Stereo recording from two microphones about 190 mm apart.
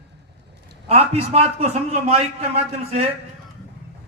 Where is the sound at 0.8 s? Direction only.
30° right (ahead or behind).